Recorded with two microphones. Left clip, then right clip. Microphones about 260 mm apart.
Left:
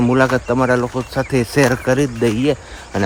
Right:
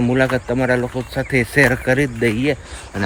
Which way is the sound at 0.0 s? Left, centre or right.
Centre.